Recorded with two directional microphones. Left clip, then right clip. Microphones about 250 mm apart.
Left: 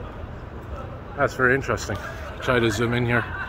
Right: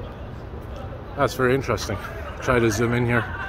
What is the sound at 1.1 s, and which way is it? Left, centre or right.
Speech, centre.